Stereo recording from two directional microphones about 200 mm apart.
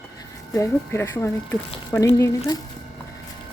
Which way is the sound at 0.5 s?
15° left (ahead or behind).